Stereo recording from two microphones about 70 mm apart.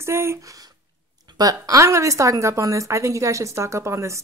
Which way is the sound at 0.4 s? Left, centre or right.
Right.